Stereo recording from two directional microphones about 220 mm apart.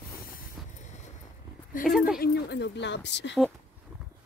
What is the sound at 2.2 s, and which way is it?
Speech, 50° left (ahead or behind).